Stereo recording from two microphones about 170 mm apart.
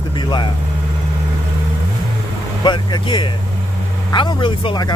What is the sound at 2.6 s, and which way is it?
Speech, 25° left (ahead or behind).